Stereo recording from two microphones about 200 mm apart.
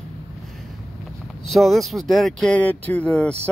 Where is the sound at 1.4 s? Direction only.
Centre (ahead or behind).